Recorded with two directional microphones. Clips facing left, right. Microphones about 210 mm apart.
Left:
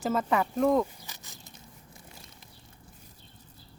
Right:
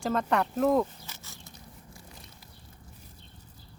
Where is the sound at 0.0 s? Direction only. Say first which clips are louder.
Even; 5° left (ahead or behind).